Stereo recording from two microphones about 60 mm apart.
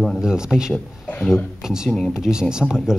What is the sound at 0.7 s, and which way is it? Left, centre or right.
Speech, centre.